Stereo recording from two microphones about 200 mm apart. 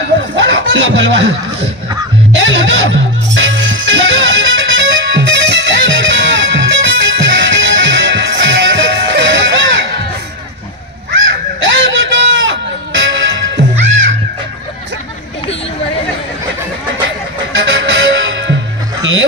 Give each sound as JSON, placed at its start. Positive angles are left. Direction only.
{"t": 0.4, "sound": "speech", "side_deg": -70}
{"t": 2.3, "sound": "music", "side_deg": -70}
{"t": 11.6, "sound": "music", "side_deg": -70}
{"t": 17.6, "sound": "music", "side_deg": -65}